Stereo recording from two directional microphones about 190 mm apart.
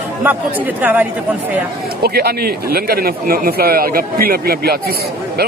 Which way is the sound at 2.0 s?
55° right (ahead or behind).